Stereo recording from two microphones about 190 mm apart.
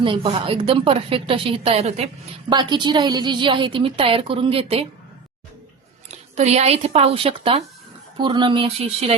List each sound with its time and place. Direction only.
0.0 s a woman's voice: 25° right (ahead or behind)
2.5 s a woman's voice: 25° right (ahead or behind)
6.1 s a woman's voice: 35° right (ahead or behind)